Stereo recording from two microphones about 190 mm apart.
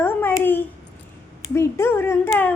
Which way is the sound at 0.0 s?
10° left (ahead or behind).